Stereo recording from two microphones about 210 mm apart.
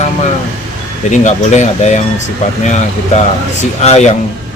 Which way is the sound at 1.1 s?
35° left (ahead or behind).